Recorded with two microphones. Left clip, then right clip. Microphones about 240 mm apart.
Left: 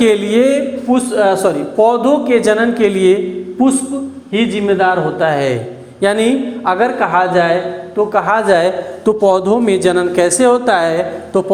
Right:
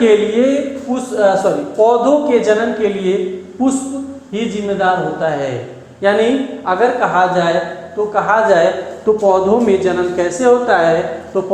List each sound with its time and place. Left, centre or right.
0.0 s a man's voice: left
0.9 s a man's voice: left